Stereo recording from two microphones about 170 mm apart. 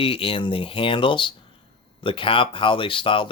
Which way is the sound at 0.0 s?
35° left (ahead or behind).